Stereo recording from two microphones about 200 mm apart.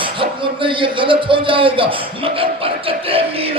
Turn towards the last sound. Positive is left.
turn(degrees=-30)  # may be behind; listen again after turning